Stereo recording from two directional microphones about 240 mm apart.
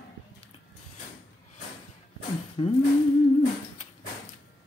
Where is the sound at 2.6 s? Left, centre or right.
Left.